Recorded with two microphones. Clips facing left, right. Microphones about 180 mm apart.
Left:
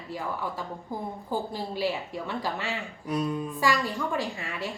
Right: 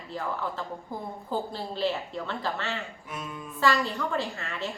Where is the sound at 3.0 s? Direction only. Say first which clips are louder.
Left 10 dB; 35° left (ahead or behind).